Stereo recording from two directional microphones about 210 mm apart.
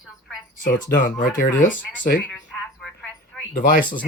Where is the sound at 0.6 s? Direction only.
40° left (ahead or behind).